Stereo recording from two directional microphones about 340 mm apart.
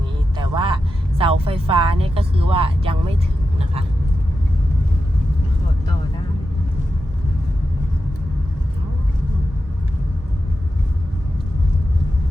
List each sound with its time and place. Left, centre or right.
0.3 s vehicle: centre
1.2 s speech: centre